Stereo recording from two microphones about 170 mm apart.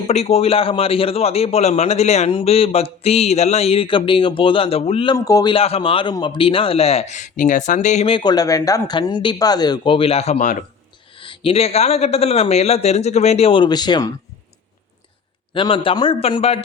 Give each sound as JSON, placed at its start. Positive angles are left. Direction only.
{"t": 0.1, "sound": "a man's voice", "side_deg": 40}
{"t": 5.1, "sound": "a man's voice", "side_deg": 20}
{"t": 11.1, "sound": "a man's voice", "side_deg": 30}
{"t": 15.5, "sound": "a man's voice", "side_deg": 30}